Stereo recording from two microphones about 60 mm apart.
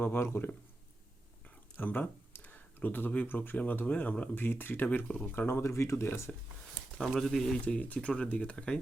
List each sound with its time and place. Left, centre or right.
0.0 s speech: left
1.7 s a sound: left
3.2 s speech: left
5.6 s speech: left
7.2 s speech: centre
7.6 s speech: left